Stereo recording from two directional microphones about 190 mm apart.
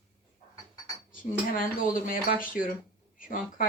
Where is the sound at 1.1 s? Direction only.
45° left (ahead or behind).